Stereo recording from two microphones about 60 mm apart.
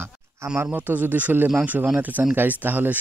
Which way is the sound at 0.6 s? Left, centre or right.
Right.